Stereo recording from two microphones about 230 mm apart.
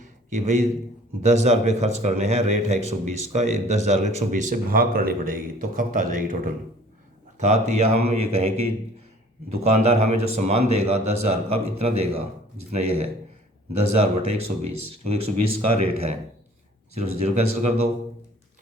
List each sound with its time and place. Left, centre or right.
0.0 s a sound: right
1.2 s a man's voice: right
7.3 s a man's voice: right